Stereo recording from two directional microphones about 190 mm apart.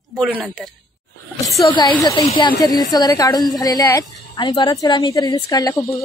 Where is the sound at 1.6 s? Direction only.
25° left (ahead or behind).